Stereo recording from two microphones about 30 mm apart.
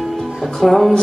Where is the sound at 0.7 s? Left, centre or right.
Centre.